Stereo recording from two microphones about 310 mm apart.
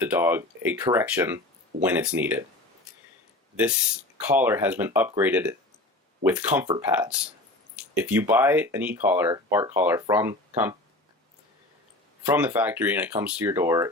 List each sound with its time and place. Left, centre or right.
0.0 s speech: centre
4.3 s speech: centre
12.3 s speech: centre